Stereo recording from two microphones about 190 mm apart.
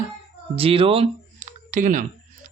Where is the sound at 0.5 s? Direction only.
30° right (ahead or behind).